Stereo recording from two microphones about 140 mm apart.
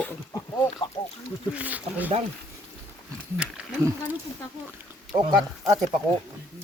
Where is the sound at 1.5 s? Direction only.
10° right (ahead or behind).